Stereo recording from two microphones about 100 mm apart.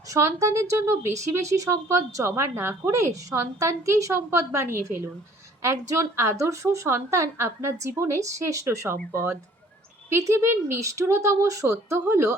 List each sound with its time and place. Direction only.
0.1 s a woman's voice: 30° right (ahead or behind)